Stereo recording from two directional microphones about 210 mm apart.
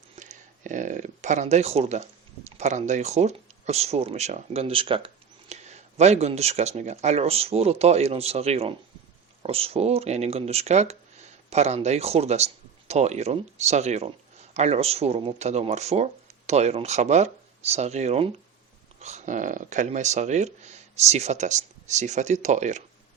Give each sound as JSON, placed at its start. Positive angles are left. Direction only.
{"t": 0.2, "sound": "speech", "side_deg": -35}